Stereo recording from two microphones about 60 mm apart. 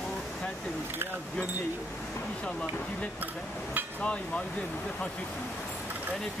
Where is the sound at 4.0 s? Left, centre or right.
Centre.